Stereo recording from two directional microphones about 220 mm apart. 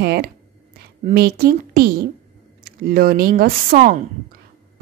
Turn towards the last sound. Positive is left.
turn(degrees=-40)  # may be behind; listen again after turning